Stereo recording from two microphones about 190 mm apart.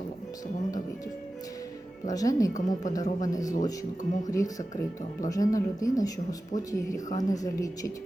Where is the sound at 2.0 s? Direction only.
20° left (ahead or behind).